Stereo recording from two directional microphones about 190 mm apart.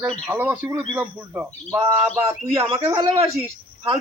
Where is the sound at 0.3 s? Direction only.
10° right (ahead or behind).